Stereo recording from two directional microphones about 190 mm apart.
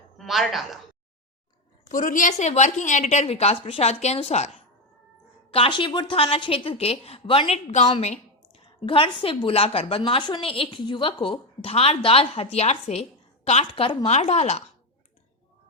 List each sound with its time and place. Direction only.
0.2 s a woman's voice: centre (ahead or behind)
1.9 s a woman's voice: 45° left (ahead or behind)
7.9 s a woman's voice: 25° left (ahead or behind)